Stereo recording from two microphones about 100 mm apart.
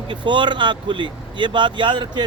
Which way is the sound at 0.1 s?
55° right (ahead or behind).